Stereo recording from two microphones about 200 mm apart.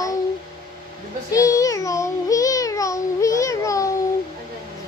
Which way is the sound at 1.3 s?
15° left (ahead or behind).